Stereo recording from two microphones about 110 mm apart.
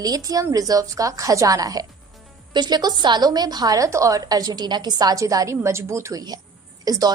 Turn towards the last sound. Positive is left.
turn(degrees=-35)  # may be behind; listen again after turning